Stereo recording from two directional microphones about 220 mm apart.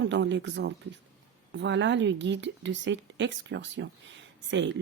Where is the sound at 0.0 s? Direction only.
55° right (ahead or behind).